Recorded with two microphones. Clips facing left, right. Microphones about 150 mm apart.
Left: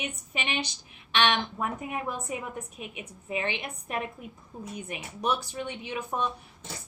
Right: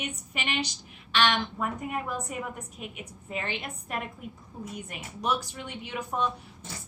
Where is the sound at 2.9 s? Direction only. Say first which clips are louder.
Left 4 dB; 15° left (ahead or behind).